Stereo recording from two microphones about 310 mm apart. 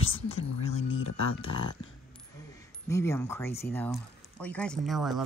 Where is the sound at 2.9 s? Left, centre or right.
Centre.